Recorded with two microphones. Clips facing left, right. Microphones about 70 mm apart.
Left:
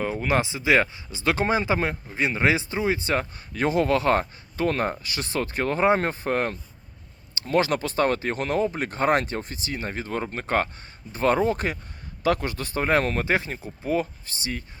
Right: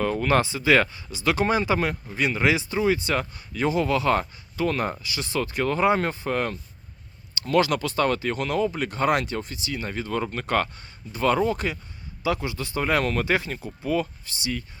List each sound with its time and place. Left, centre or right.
0.0 s speech: centre
3.5 s speech: left